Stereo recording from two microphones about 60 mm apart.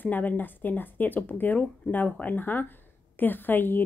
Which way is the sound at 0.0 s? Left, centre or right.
Left.